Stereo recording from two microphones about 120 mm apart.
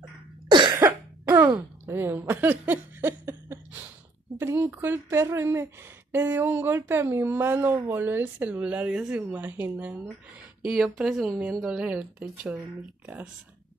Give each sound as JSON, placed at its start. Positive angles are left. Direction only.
{"t": 0.5, "sound": "cough", "side_deg": -40}
{"t": 0.7, "sound": "cough", "side_deg": -20}
{"t": 1.9, "sound": "a woman's voice", "side_deg": -15}
{"t": 10.6, "sound": "speech", "side_deg": -5}